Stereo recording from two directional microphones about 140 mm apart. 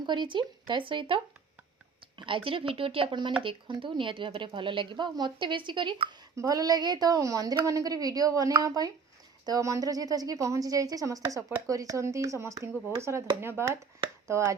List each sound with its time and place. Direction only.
0.0 s a woman's voice: 35° right (ahead or behind)
6.3 s a woman's voice: 25° right (ahead or behind)